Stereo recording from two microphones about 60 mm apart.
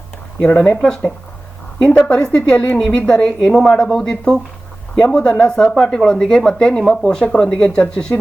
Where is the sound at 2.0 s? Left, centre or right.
Centre.